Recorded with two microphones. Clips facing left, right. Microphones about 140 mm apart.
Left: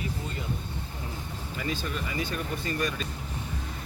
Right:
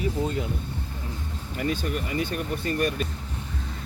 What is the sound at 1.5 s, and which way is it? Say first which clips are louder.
Speech: right 5 dB; 50° right (ahead or behind).